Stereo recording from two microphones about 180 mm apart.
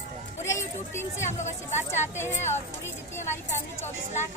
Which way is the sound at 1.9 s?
15° left (ahead or behind).